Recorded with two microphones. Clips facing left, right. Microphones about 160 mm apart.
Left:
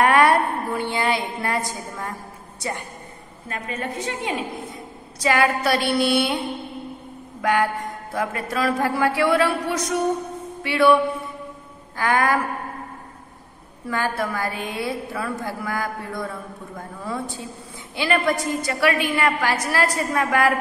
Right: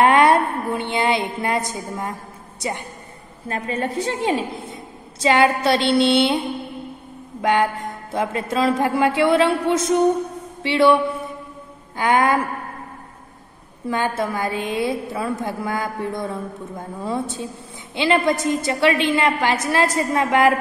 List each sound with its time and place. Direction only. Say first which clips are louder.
0.0 s a sound: right 2 dB; 20° right (ahead or behind)
3.4 s a woman's voice: right 5 dB; 30° right (ahead or behind)
7.4 s a woman's voice: right 2 dB; 25° right (ahead or behind)
10.6 s mantra: right 1 dB; 25° right (ahead or behind)
12.0 s a woman's voice: right 3 dB; 20° right (ahead or behind)
13.8 s a woman's voice: right 2 dB; 20° right (ahead or behind)